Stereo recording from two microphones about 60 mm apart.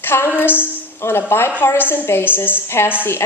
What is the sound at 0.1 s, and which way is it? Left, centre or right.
A woman's voice, left.